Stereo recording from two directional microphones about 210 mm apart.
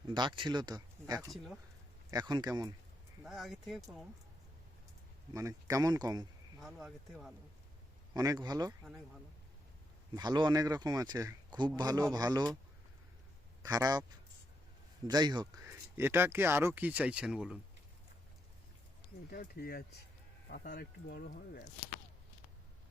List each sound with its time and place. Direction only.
0.1 s speech: 20° right (ahead or behind)
3.2 s speech: centre (ahead or behind)
5.3 s speech: 15° right (ahead or behind)
6.6 s speech: centre (ahead or behind)
8.1 s speech: 20° right (ahead or behind)
10.2 s speech: 20° right (ahead or behind)
13.6 s speech: 15° right (ahead or behind)
15.0 s speech: 20° right (ahead or behind)
19.3 s speech: 45° left (ahead or behind)